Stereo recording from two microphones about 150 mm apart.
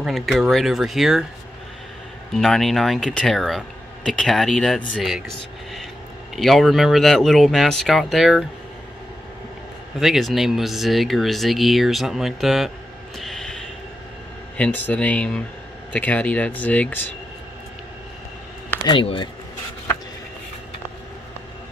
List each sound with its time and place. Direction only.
0.0 s speech: centre (ahead or behind)
2.3 s speech: centre (ahead or behind)
6.3 s speech: centre (ahead or behind)
9.9 s speech: centre (ahead or behind)
13.2 s a sound: 5° left (ahead or behind)
14.6 s speech: 10° left (ahead or behind)
18.9 s speech: 35° left (ahead or behind)